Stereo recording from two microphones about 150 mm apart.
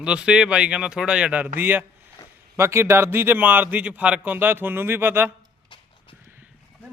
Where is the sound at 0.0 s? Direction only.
5° right (ahead or behind).